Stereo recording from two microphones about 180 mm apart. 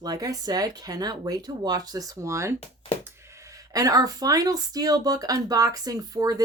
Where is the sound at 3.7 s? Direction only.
20° right (ahead or behind).